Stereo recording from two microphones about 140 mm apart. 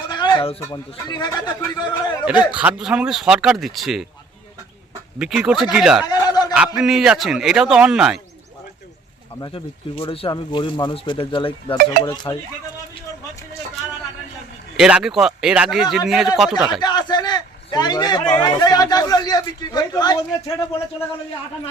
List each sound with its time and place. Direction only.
0.1 s speech: 30° left (ahead or behind)
2.5 s speech: 10° right (ahead or behind)
5.2 s speech: 5° right (ahead or behind)
6.1 s a sound: 30° left (ahead or behind)
6.7 s speech: 5° right (ahead or behind)
9.4 s speech: 40° left (ahead or behind)
14.8 s speech: 5° right (ahead or behind)
16.8 s a sound: 30° left (ahead or behind)
18.3 s a man's voice: 30° left (ahead or behind)